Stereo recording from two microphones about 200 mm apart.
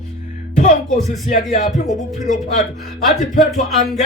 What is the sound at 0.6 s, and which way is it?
Speech, 35° left (ahead or behind).